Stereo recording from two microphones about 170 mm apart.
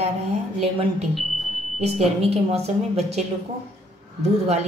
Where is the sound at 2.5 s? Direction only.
40° right (ahead or behind).